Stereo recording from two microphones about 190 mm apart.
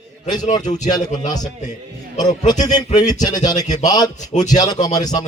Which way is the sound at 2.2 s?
20° left (ahead or behind).